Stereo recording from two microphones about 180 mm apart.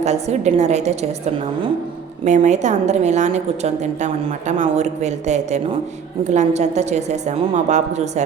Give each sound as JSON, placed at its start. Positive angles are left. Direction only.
{"t": 0.0, "sound": "a woman's voice", "side_deg": -40}
{"t": 2.2, "sound": "a woman's voice", "side_deg": -40}